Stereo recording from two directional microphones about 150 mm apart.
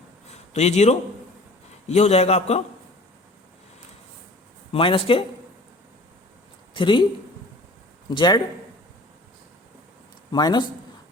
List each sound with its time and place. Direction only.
0.3 s a sound: 50° left (ahead or behind)
1.9 s a man's voice: 45° left (ahead or behind)
4.7 s speech: 35° left (ahead or behind)
6.7 s speech: 30° left (ahead or behind)
8.1 s a man's voice: 30° left (ahead or behind)
10.3 s a man's voice: 30° left (ahead or behind)